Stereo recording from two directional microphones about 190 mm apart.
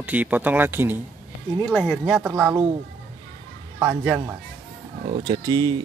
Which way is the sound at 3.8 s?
10° right (ahead or behind).